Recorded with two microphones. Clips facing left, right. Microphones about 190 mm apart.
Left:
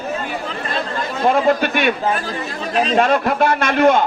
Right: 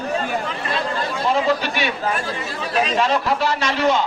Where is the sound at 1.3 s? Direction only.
55° left (ahead or behind).